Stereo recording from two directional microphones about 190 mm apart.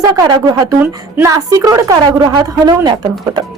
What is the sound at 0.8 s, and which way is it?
A woman's voice, 10° right (ahead or behind).